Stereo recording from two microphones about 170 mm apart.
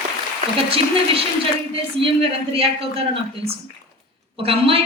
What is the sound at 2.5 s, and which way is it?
A man's voice, 35° right (ahead or behind).